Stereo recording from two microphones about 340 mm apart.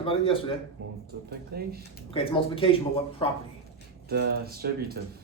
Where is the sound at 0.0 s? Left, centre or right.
Centre.